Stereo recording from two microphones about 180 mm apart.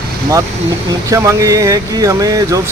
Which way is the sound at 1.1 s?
15° right (ahead or behind).